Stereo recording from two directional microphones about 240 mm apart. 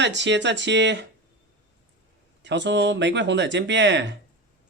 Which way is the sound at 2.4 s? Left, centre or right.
Right.